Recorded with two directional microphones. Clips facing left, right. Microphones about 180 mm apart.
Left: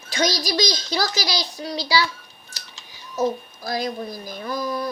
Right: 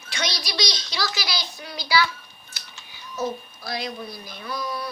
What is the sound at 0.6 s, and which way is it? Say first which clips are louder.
Child singing: left 3 dB; 45° left (ahead or behind).